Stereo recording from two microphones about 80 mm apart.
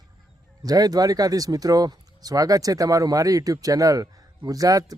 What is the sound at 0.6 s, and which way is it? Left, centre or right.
Speech, right.